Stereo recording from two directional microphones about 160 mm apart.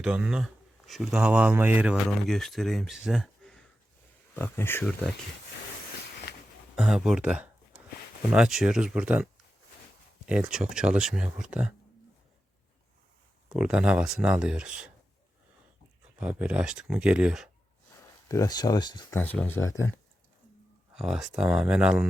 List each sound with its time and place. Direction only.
0.0 s speech: 5° right (ahead or behind)
2.0 s speech: centre (ahead or behind)
4.4 s speech: 15° left (ahead or behind)
6.7 s speech: 5° right (ahead or behind)
10.2 s speech: 5° right (ahead or behind)
13.5 s speech: 5° right (ahead or behind)
16.1 s speech: 10° right (ahead or behind)
18.3 s speech: 20° left (ahead or behind)
19.1 s speech: 10° left (ahead or behind)
20.9 s speech: centre (ahead or behind)